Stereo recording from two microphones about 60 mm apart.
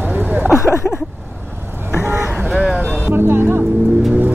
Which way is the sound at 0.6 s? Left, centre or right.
Left.